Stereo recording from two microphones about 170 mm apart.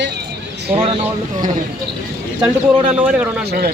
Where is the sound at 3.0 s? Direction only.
10° right (ahead or behind).